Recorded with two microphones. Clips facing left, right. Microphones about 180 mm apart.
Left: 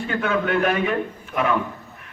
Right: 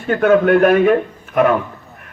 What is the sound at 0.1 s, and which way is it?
A man's voice, 50° right (ahead or behind).